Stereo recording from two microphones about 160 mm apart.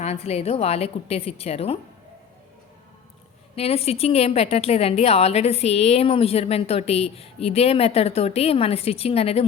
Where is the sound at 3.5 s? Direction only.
40° left (ahead or behind).